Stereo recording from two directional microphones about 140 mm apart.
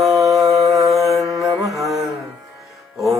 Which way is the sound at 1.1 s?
Centre (ahead or behind).